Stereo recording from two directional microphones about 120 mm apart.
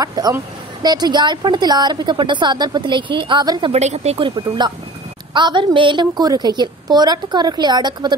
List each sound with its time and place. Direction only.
0.0 s a woman's voice: 30° right (ahead or behind)
3.7 s speech: 65° right (ahead or behind)
4.2 s a woman's voice: 40° right (ahead or behind)